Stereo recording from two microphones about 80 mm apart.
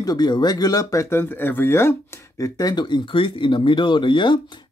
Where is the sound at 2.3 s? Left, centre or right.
Left.